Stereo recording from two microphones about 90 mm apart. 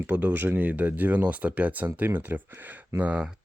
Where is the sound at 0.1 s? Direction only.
20° right (ahead or behind).